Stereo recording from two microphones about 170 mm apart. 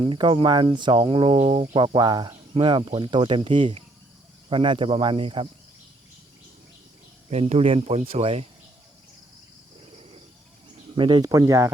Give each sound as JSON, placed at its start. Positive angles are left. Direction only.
{"t": 0.0, "sound": "speech", "side_deg": -30}
{"t": 7.3, "sound": "speech", "side_deg": -40}
{"t": 10.9, "sound": "speech", "side_deg": -25}